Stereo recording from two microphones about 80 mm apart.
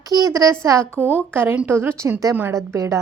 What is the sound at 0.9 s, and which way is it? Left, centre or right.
A woman's voice, right.